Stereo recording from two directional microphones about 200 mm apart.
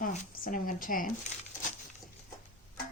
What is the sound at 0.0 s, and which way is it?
A woman's voice, 40° left (ahead or behind).